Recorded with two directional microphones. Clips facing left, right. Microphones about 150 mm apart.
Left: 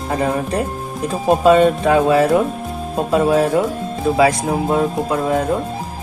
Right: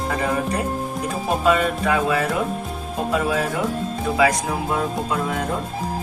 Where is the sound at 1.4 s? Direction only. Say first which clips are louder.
Left 8 dB; 30° left (ahead or behind).